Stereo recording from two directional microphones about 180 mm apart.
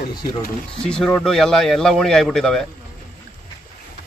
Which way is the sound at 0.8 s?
5° left (ahead or behind).